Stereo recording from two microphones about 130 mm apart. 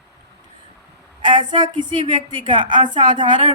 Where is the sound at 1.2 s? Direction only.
35° right (ahead or behind).